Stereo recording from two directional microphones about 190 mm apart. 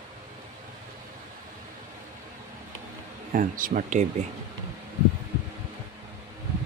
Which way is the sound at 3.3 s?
45° right (ahead or behind).